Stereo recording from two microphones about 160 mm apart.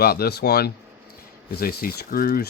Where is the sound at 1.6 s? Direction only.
70° left (ahead or behind).